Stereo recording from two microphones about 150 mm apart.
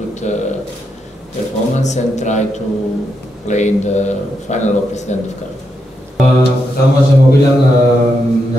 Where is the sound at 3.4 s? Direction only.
50° left (ahead or behind).